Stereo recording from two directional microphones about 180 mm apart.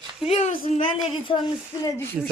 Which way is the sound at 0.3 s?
40° left (ahead or behind).